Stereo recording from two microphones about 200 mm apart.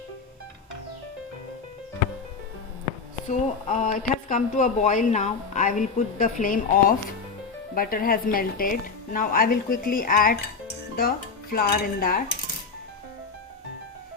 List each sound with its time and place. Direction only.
3.2 s a woman's voice: 40° left (ahead or behind)
11.5 s a woman's voice: 45° left (ahead or behind)